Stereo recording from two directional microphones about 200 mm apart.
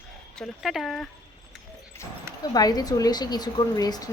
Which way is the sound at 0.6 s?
Centre (ahead or behind).